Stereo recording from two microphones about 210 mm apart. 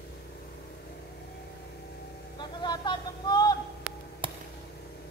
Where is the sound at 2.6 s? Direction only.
20° left (ahead or behind).